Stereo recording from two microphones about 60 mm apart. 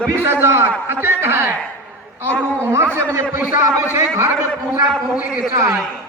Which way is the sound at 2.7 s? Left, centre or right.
Right.